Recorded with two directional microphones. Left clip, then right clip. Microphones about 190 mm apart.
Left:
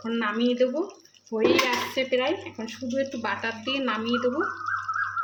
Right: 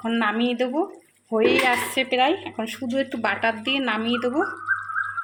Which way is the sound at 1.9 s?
45° right (ahead or behind).